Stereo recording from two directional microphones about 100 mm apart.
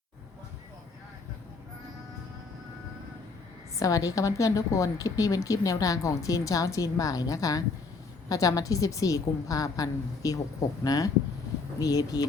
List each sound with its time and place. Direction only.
3.8 s a woman's voice: 35° left (ahead or behind)